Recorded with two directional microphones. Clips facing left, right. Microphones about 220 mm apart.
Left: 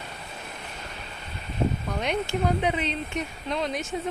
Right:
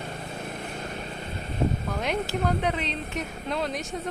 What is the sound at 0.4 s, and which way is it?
Vehicle, 50° right (ahead or behind).